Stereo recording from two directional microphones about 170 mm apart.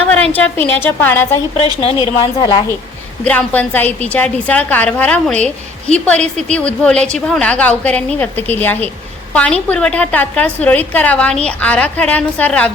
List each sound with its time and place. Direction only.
0.1 s a woman's voice: 5° left (ahead or behind)
1.5 s a woman's voice: 35° left (ahead or behind)
2.2 s a woman's voice: 25° left (ahead or behind)
3.2 s a woman's voice: 10° left (ahead or behind)